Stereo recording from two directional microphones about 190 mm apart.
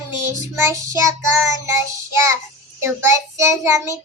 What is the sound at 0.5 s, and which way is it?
Child singing, 15° right (ahead or behind).